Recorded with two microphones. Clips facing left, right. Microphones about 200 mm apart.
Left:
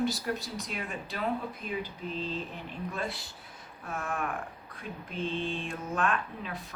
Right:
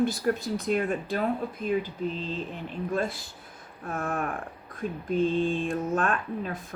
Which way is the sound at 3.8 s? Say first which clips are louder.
Right 4 dB; 40° right (ahead or behind).